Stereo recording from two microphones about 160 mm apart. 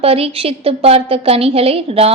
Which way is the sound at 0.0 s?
35° right (ahead or behind).